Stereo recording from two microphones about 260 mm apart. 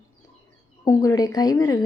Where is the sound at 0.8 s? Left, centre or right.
Centre.